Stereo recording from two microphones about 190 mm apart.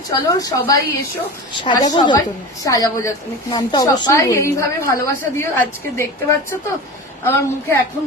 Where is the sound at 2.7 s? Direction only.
20° left (ahead or behind).